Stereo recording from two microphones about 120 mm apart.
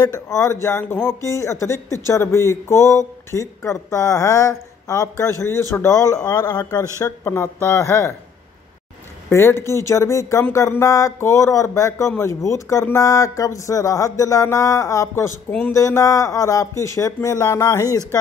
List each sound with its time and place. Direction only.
0.0 s speech: 30° left (ahead or behind)
9.3 s speech: 20° left (ahead or behind)